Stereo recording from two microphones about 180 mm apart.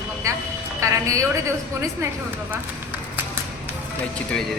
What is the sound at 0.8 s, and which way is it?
Speech, 20° right (ahead or behind).